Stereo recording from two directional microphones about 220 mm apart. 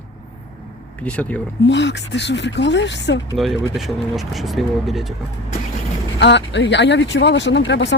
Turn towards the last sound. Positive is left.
turn(degrees=55)  # may be behind; listen again after turning